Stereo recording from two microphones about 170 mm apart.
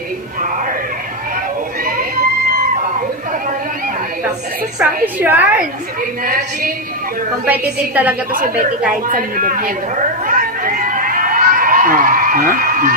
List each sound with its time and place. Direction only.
5.2 s a woman's voice: 10° right (ahead or behind)
6.2 s a woman's voice: 55° right (ahead or behind)
7.4 s a woman's voice: 10° right (ahead or behind)
9.0 s speech: 55° right (ahead or behind)
10.2 s a sound: 50° right (ahead or behind)